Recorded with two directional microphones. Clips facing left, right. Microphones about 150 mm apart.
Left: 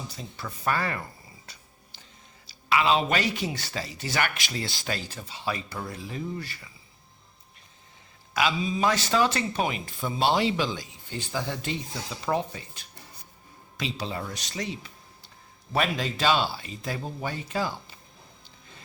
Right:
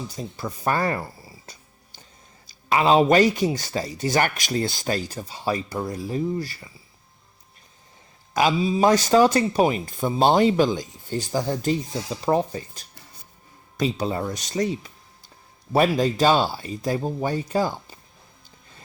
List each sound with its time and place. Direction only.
0.2 s speech: 40° right (ahead or behind)
2.6 s speech: 40° right (ahead or behind)
8.3 s speech: 40° right (ahead or behind)